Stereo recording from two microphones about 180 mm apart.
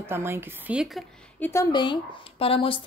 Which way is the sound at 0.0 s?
15° right (ahead or behind).